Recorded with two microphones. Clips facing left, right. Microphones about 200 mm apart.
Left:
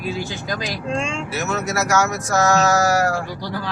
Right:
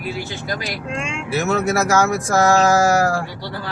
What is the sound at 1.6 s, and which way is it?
Speech, 30° right (ahead or behind).